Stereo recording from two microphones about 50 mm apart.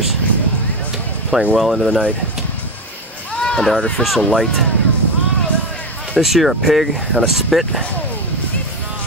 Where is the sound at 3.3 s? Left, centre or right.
Centre.